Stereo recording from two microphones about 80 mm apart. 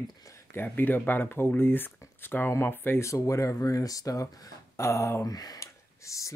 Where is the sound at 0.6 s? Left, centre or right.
Left.